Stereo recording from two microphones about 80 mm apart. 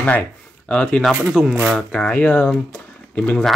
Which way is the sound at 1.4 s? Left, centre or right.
Centre.